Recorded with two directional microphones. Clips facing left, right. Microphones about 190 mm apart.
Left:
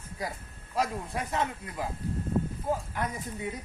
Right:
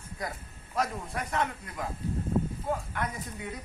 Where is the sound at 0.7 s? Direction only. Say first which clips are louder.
Left 1 dB; 25° left (ahead or behind).